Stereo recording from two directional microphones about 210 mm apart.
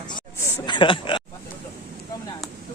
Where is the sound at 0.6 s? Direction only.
20° left (ahead or behind).